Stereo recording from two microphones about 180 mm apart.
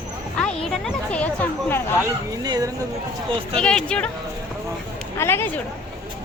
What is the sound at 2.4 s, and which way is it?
Speech, 20° right (ahead or behind).